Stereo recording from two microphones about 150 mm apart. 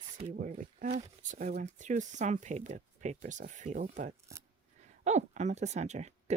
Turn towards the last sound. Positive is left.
turn(degrees=-50)  # may be behind; listen again after turning